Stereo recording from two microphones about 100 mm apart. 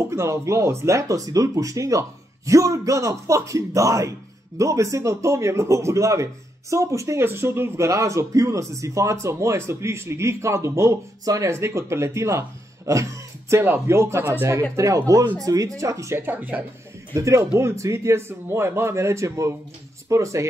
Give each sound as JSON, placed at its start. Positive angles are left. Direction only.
{"t": 0.0, "sound": "a man's voice", "side_deg": -30}
{"t": 16.2, "sound": "speech", "side_deg": -20}
{"t": 17.1, "sound": "a man's voice", "side_deg": -30}